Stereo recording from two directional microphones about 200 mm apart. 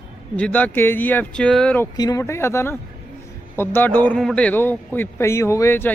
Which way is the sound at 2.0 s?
15° left (ahead or behind).